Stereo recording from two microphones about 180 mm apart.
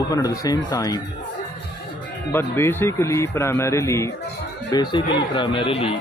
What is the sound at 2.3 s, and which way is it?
A man's voice, 15° left (ahead or behind).